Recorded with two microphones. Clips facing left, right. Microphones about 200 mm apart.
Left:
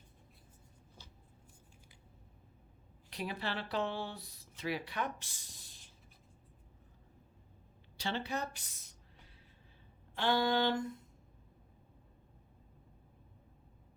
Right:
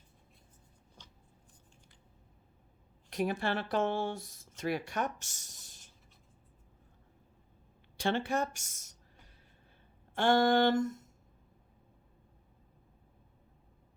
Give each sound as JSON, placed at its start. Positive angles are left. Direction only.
{"t": 1.0, "sound": "a sound", "side_deg": 5}
{"t": 3.1, "sound": "speech", "side_deg": -45}
{"t": 7.9, "sound": "speech", "side_deg": -50}
{"t": 10.2, "sound": "speech", "side_deg": -50}